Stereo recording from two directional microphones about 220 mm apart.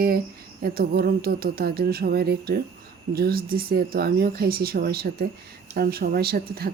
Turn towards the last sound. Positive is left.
turn(degrees=-45)  # may be behind; listen again after turning